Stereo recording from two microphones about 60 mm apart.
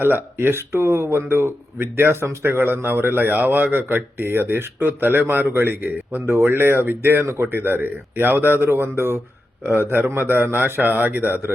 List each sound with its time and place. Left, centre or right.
0.0 s speech: right